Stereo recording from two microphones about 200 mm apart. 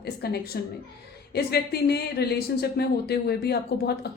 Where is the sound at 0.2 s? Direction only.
50° left (ahead or behind).